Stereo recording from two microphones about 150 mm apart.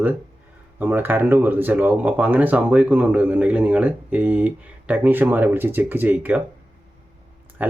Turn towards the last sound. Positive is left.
turn(degrees=-10)  # may be behind; listen again after turning